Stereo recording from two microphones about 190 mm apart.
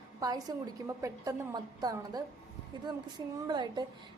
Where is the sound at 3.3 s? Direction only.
20° right (ahead or behind).